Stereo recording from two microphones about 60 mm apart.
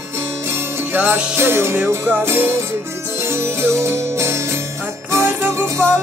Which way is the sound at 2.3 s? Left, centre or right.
Right.